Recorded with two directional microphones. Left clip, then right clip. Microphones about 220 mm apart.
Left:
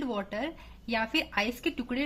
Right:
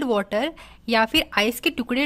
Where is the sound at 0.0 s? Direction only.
50° right (ahead or behind).